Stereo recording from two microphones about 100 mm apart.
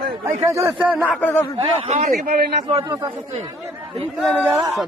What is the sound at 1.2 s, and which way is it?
Speech, 20° left (ahead or behind).